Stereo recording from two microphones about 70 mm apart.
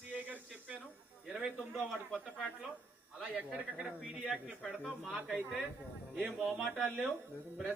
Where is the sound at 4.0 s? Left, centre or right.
Centre.